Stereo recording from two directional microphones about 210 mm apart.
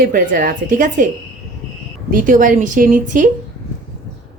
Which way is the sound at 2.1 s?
40° right (ahead or behind).